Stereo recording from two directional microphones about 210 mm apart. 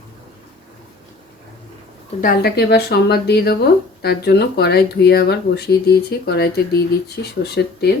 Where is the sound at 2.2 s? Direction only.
45° left (ahead or behind).